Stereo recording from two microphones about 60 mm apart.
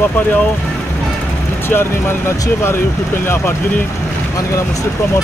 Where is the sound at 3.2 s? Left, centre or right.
Left.